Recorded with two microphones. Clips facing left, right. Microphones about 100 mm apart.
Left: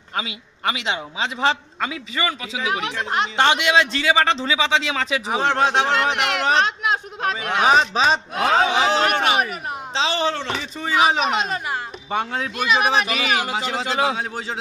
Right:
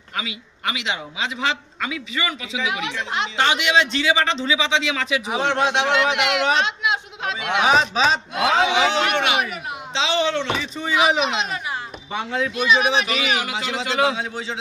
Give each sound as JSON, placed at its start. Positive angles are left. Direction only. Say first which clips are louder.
{"t": 0.1, "sound": "a man's voice", "louder": "left 2 dB", "side_deg": 35}